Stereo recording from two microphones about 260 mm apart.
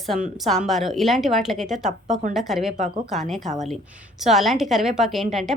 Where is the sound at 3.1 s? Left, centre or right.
Centre.